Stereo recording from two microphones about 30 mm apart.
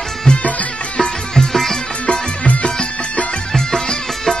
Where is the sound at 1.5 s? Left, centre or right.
Centre.